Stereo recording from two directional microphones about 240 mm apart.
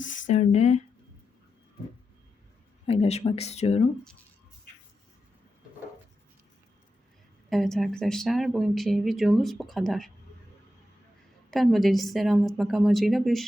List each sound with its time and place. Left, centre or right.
0.0 s speech: left
2.8 s speech: left
7.5 s speech: centre
11.5 s speech: centre